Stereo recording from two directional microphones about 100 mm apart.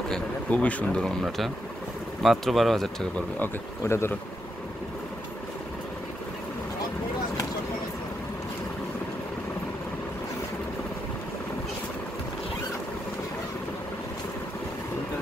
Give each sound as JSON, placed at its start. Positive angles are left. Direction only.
{"t": 0.1, "sound": "speech", "side_deg": 15}
{"t": 2.2, "sound": "speech", "side_deg": 0}
{"t": 3.3, "sound": "speech", "side_deg": 25}